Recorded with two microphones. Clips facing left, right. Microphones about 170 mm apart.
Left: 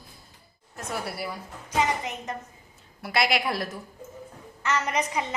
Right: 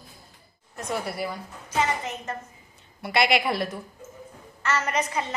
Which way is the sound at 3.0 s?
Centre (ahead or behind).